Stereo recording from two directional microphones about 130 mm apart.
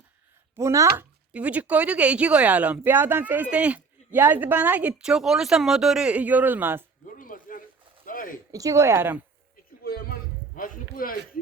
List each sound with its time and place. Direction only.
0.5 s speech: 25° right (ahead or behind)
1.3 s speech: 10° right (ahead or behind)
7.2 s a sound: 90° left
8.5 s speech: 25° right (ahead or behind)
10.5 s speech: 90° left